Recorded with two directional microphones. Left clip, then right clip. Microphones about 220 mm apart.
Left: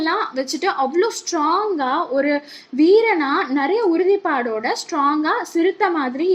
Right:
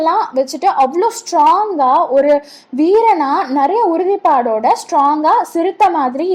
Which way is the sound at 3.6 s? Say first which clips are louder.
Right 6 dB; 10° right (ahead or behind).